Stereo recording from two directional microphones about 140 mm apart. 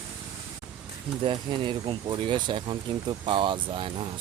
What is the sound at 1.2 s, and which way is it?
Speech, 40° right (ahead or behind).